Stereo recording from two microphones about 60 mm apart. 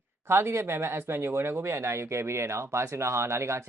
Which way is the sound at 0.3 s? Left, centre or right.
Right.